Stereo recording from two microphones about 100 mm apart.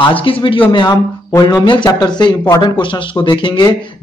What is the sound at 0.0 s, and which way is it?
Speech, 65° left (ahead or behind).